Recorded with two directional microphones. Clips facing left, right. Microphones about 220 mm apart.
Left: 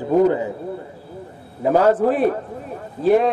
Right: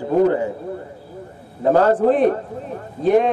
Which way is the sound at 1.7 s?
10° left (ahead or behind).